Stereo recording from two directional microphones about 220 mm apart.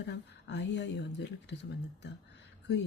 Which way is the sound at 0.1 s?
55° left (ahead or behind).